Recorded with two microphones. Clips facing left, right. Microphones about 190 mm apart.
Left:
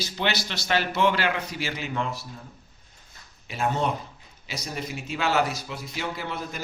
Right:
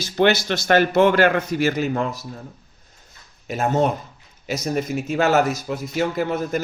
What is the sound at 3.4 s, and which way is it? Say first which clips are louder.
Speech: right 6 dB; 45° right (ahead or behind).